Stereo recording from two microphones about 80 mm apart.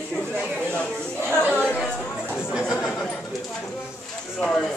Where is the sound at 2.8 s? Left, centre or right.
Centre.